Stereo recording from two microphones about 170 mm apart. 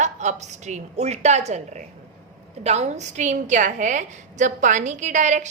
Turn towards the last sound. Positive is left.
turn(degrees=-45)  # may be behind; listen again after turning